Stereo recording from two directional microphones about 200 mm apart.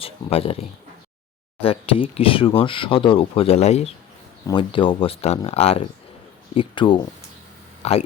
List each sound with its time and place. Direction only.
0.0 s speech: 30° left (ahead or behind)
1.6 s speech: 30° left (ahead or behind)